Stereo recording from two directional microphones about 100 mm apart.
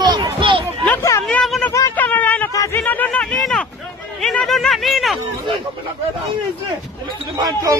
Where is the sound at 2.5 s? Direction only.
30° left (ahead or behind).